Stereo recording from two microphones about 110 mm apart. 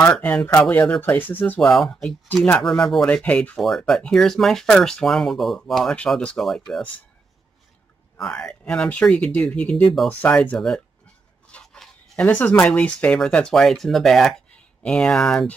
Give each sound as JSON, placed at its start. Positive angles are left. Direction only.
{"t": 0.2, "sound": "speech", "side_deg": 10}
{"t": 1.6, "sound": "speech", "side_deg": 5}
{"t": 8.2, "sound": "speech", "side_deg": 10}